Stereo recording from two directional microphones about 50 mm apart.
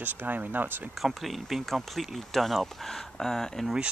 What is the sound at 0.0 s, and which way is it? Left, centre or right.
Speech, right.